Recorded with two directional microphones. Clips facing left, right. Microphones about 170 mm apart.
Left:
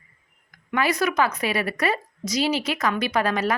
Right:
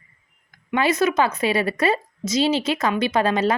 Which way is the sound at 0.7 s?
25° right (ahead or behind).